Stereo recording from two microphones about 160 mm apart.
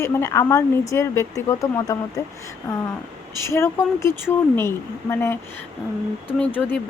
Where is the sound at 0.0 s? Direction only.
20° left (ahead or behind).